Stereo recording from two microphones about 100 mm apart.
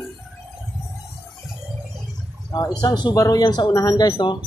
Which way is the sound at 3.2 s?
35° left (ahead or behind).